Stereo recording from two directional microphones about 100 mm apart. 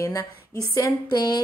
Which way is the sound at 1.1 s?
45° left (ahead or behind).